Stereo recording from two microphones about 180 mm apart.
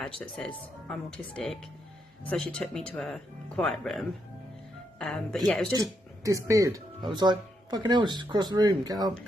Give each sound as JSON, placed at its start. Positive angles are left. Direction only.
{"t": 0.0, "sound": "speech", "side_deg": 5}
{"t": 5.7, "sound": "speech", "side_deg": -20}